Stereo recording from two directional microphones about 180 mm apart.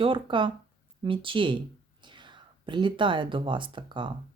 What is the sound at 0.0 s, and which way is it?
Speech, 30° right (ahead or behind).